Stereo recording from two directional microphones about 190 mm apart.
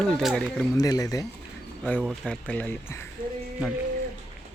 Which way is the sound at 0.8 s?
20° left (ahead or behind).